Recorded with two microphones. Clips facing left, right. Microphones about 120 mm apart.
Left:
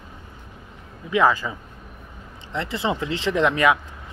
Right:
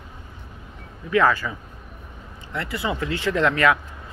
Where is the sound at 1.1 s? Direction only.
15° left (ahead or behind).